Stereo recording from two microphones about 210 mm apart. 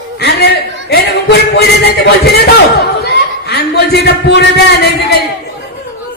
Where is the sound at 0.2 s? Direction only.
50° left (ahead or behind).